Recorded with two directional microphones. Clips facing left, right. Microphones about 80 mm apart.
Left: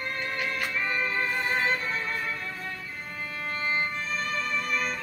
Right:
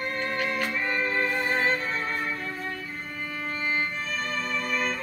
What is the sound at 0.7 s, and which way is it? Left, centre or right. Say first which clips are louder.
Music: right 2 dB; right.